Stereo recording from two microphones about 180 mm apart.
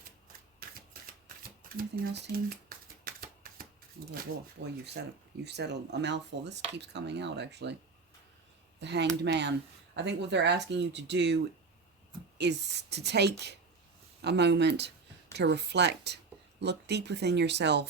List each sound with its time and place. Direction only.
0.9 s shuffling cards: 55° right (ahead or behind)
1.7 s typewriter: 55° right (ahead or behind)
4.6 s speech: 70° right (ahead or behind)
8.8 s speech: 70° right (ahead or behind)